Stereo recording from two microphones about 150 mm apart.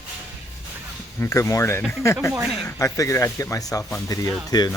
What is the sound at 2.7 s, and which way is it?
Speech, 20° left (ahead or behind).